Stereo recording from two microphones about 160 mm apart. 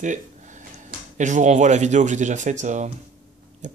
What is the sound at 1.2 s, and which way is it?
Speech, 50° right (ahead or behind).